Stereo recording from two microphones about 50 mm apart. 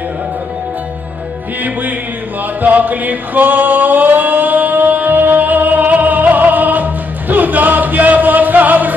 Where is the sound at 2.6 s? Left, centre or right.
Right.